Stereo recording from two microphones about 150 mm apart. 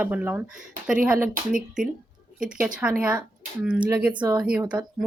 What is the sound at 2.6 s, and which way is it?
Speech, 10° right (ahead or behind).